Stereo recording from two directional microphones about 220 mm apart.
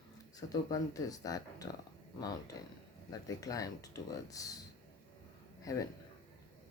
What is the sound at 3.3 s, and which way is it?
Speech, 15° left (ahead or behind).